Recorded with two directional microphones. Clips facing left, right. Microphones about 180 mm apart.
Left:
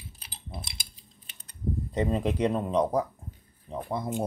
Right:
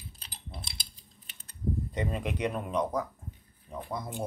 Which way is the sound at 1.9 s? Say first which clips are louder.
Left 6 dB; 30° left (ahead or behind).